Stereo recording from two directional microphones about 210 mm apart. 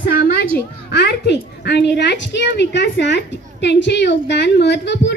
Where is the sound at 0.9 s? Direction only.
55° left (ahead or behind).